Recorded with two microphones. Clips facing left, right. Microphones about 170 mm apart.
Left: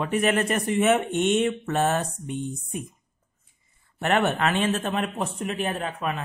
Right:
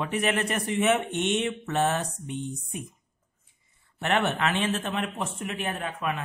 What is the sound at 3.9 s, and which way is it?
Speech, 45° left (ahead or behind).